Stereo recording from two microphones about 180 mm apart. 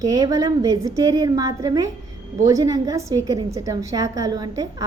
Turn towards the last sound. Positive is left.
turn(degrees=-20)  # may be behind; listen again after turning